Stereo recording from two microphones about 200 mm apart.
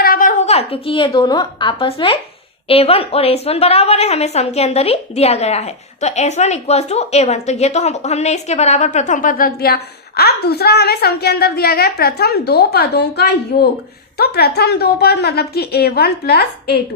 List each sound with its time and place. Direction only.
0.0 s a woman's voice: 45° left (ahead or behind)